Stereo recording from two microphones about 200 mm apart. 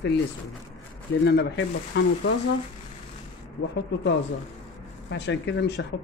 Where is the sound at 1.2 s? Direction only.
60° left (ahead or behind).